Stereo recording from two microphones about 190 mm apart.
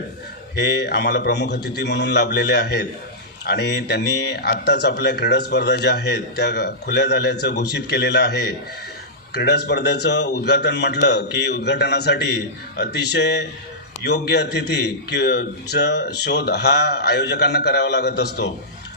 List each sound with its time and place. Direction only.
0.5 s speech: 60° left (ahead or behind)